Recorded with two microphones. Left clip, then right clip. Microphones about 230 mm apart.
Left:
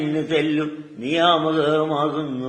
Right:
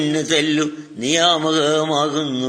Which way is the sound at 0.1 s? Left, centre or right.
Right.